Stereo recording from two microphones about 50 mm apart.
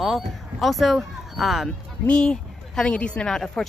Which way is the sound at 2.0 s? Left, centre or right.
Centre.